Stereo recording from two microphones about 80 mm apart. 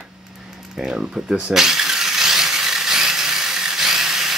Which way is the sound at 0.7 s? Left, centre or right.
Centre.